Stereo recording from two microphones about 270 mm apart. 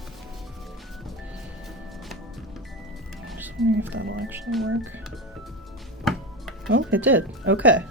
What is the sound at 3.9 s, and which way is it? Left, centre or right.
Music, right.